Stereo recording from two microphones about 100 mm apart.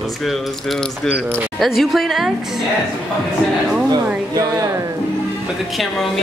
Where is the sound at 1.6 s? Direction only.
Centre (ahead or behind).